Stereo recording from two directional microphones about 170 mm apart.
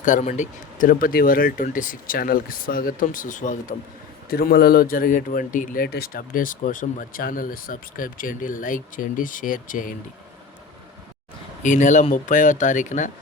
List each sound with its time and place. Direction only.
0.0 s speech: 45° left (ahead or behind)
4.3 s speech: 65° left (ahead or behind)
11.6 s speech: 45° left (ahead or behind)